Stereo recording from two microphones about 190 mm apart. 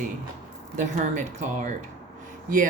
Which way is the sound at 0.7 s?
40° right (ahead or behind).